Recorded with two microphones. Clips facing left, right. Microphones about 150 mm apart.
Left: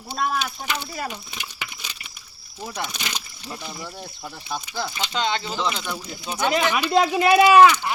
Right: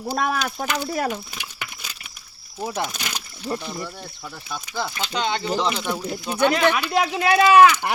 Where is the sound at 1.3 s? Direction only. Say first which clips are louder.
Even; 5° right (ahead or behind).